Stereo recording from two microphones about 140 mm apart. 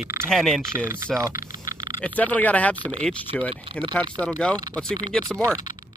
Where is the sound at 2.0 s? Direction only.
10° left (ahead or behind).